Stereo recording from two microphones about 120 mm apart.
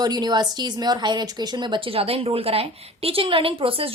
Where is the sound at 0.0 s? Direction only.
35° right (ahead or behind).